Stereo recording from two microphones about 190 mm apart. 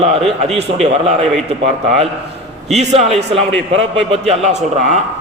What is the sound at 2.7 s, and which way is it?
Speech, 35° right (ahead or behind).